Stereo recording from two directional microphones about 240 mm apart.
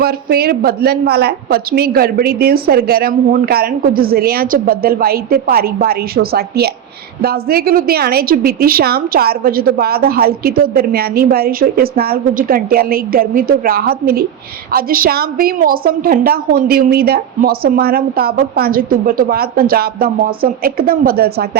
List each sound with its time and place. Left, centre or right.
0.0 s a woman's voice: right